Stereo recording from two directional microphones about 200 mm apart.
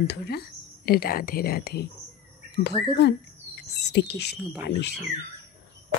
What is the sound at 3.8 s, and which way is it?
Speech, 60° left (ahead or behind).